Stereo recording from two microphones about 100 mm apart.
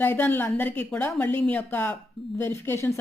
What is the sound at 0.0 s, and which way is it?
A woman's voice, 20° left (ahead or behind).